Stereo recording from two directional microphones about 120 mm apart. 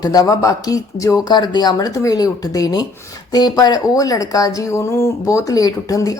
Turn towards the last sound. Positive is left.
turn(degrees=30)  # may be behind; listen again after turning